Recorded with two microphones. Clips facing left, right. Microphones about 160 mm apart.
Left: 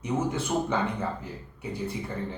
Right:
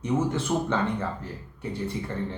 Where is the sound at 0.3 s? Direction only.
10° left (ahead or behind).